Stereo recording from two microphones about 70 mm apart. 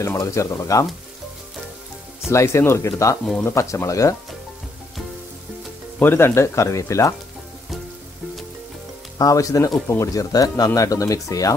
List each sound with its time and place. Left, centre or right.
0.0 s speech: left
2.2 s speech: left
5.9 s speech: left
9.2 s speech: left